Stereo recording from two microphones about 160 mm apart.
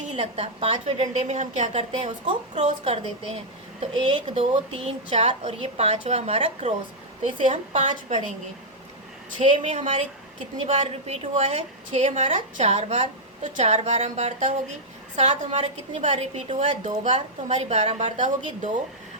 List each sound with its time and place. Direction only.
0.0 s a woman's voice: 40° right (ahead or behind)
9.6 s a woman's voice: 50° right (ahead or behind)